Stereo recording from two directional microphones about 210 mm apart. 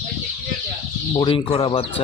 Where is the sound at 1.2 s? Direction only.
20° left (ahead or behind).